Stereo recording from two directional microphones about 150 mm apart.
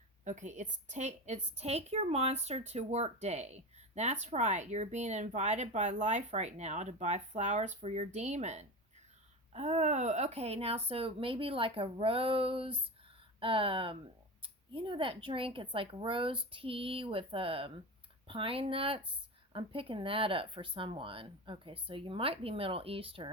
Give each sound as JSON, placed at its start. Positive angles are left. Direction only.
{"t": 0.3, "sound": "a woman's voice", "side_deg": -55}